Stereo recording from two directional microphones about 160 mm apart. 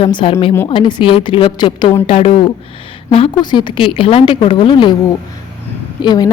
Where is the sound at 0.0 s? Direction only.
30° left (ahead or behind).